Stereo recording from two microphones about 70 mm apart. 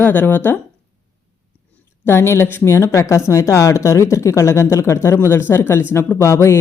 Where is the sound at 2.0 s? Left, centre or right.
Left.